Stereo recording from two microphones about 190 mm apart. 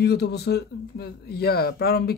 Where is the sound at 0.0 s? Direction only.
60° left (ahead or behind).